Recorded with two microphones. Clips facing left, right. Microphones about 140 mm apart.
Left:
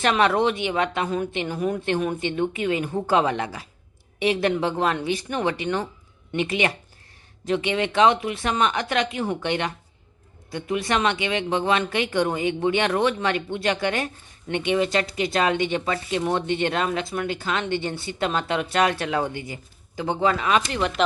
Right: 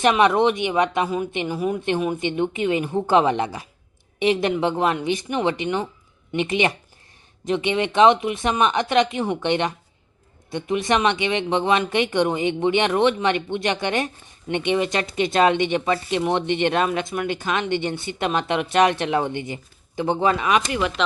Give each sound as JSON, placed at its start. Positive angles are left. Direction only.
{"t": 0.0, "sound": "speech", "side_deg": -15}